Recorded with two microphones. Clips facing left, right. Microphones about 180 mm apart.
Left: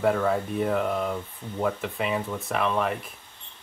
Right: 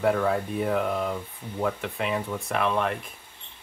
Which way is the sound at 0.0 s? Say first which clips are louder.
Even; centre (ahead or behind).